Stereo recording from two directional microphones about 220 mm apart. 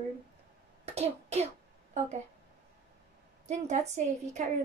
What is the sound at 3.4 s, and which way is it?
Speech, 30° right (ahead or behind).